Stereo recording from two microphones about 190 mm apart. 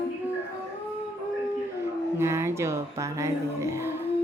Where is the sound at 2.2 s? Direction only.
15° right (ahead or behind).